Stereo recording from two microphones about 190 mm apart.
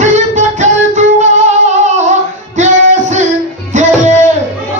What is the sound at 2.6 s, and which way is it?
Music, 40° right (ahead or behind).